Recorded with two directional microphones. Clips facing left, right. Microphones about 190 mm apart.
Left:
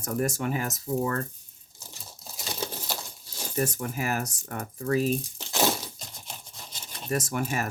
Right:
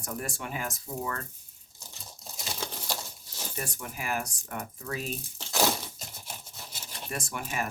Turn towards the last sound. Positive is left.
turn(degrees=45)  # may be behind; listen again after turning